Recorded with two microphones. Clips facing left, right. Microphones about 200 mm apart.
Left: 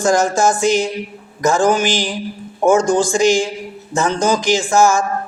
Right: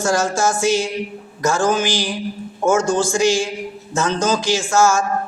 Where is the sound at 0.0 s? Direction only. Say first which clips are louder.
Left 4 dB; 15° left (ahead or behind).